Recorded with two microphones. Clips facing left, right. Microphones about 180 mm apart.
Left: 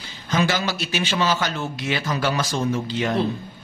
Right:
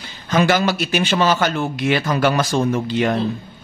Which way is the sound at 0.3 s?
55° right (ahead or behind).